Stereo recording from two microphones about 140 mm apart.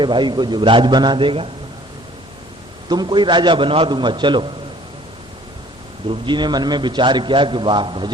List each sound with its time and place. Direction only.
0.0 s a man's voice: 35° right (ahead or behind)
2.9 s a man's voice: 30° right (ahead or behind)
6.1 s a man's voice: 35° right (ahead or behind)